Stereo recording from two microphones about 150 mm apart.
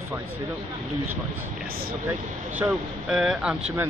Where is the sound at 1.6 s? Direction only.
80° right.